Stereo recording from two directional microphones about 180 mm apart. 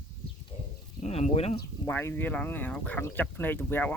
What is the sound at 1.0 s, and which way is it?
Speech, 35° left (ahead or behind).